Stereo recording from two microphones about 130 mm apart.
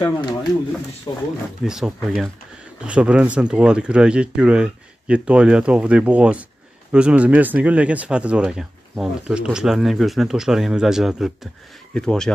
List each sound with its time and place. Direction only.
0.0 s speech: 35° left (ahead or behind)
1.6 s speech: 5° right (ahead or behind)